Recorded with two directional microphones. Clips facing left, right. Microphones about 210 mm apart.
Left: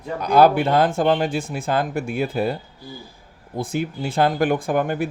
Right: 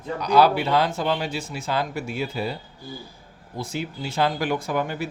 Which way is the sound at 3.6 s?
50° left (ahead or behind).